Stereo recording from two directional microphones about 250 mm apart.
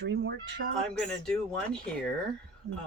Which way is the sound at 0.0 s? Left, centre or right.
Right.